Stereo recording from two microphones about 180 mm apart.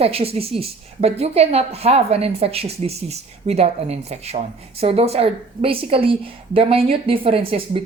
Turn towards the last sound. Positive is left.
turn(degrees=-30)  # may be behind; listen again after turning